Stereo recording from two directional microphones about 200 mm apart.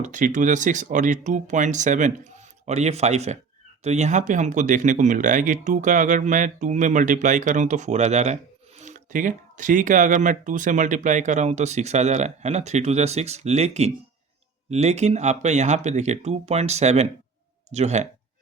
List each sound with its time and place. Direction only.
0.0 s speech: 40° right (ahead or behind)